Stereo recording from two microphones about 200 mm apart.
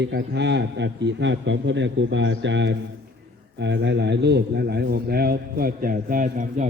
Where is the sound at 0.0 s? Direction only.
60° right (ahead or behind).